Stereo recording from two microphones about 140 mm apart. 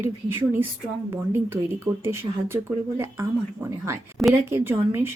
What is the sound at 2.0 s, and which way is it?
Speech, 20° right (ahead or behind).